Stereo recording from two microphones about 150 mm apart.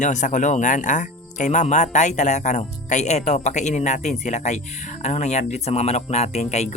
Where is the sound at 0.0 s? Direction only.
55° left (ahead or behind).